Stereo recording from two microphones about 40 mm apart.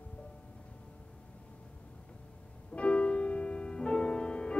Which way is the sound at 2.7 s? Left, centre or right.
Left.